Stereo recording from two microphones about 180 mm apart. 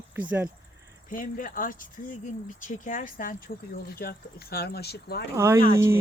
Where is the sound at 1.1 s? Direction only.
50° left (ahead or behind).